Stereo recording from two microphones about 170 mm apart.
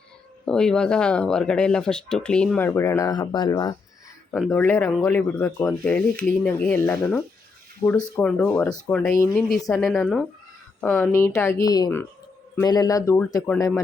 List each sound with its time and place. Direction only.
0.4 s speech: 5° left (ahead or behind); by 3.8 s 25° left (ahead or behind)
4.3 s speech: 5° left (ahead or behind); by 8.0 s 20° left (ahead or behind)
8.2 s speech: 5° left (ahead or behind)
11.1 s speech: 15° left (ahead or behind)